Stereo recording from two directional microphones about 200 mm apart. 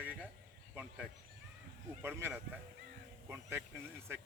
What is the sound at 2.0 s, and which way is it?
Speech, 10° right (ahead or behind).